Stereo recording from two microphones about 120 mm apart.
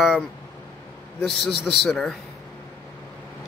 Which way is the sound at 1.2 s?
5° left (ahead or behind).